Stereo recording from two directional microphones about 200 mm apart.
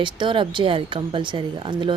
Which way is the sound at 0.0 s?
25° right (ahead or behind).